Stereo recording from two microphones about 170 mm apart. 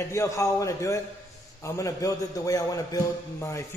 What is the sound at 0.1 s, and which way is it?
A man's voice, 15° left (ahead or behind).